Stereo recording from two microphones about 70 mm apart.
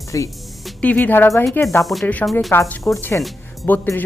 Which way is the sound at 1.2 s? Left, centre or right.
Left.